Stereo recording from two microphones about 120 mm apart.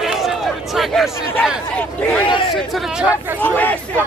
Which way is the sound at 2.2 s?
45° left (ahead or behind).